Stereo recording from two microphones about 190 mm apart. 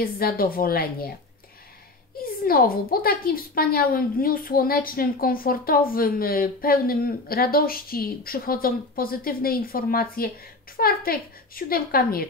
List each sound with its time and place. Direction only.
0.0 s speech: 50° left (ahead or behind)
2.1 s speech: 50° left (ahead or behind)